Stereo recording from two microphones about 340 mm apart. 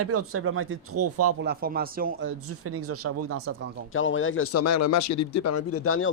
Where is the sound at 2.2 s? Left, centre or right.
Right.